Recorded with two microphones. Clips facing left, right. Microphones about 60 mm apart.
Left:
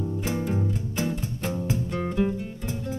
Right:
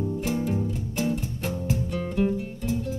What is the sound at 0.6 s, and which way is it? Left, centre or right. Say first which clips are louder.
Music: even; left.